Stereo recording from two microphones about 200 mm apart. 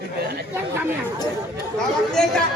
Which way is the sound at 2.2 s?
Centre (ahead or behind).